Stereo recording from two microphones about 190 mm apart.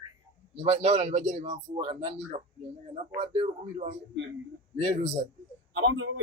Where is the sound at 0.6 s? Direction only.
35° right (ahead or behind).